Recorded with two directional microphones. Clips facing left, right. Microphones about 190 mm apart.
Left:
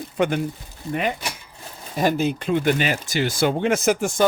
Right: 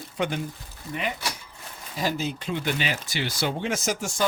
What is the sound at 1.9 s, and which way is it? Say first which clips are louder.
Speech: left 7 dB; 55° left (ahead or behind).